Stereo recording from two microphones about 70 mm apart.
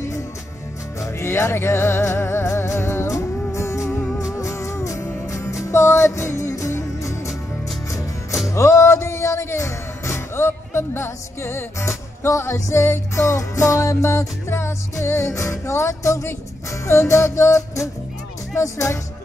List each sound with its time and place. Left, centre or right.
1.0 s music: left
8.5 s music: left